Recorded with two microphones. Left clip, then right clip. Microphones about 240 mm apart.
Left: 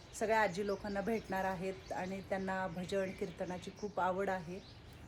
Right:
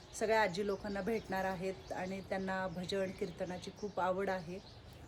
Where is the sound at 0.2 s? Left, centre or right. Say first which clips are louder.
Even; centre.